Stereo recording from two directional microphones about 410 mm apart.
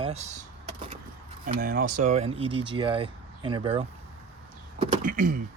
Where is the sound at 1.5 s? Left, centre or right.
Centre.